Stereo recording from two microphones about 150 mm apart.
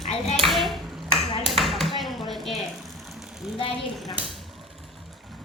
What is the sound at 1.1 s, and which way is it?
Ping, 40° left (ahead or behind).